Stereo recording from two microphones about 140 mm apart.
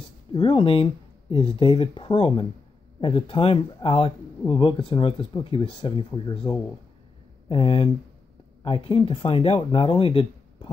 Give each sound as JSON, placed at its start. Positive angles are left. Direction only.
{"t": 0.3, "sound": "speech", "side_deg": 35}